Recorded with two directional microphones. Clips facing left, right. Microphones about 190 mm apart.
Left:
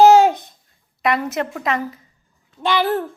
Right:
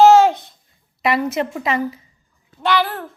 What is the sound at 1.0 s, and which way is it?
Speech, centre (ahead or behind).